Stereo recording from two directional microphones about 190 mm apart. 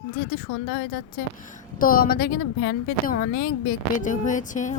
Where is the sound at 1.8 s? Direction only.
50° left (ahead or behind).